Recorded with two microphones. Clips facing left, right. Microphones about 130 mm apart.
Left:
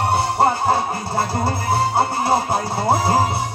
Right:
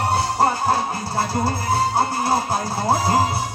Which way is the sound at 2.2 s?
25° left (ahead or behind).